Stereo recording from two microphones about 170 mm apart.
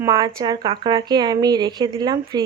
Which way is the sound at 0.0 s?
20° right (ahead or behind).